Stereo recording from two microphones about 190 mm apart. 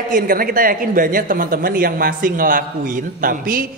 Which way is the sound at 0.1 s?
50° right (ahead or behind).